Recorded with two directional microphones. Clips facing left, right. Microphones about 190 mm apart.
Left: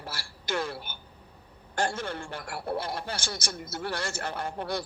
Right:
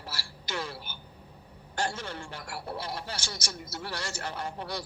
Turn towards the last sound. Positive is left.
turn(degrees=50)  # may be behind; listen again after turning